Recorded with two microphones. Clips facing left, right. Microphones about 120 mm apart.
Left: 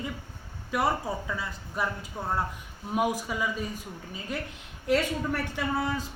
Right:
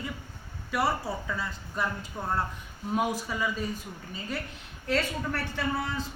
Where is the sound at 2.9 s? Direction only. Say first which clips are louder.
Left 1 dB; 15° left (ahead or behind).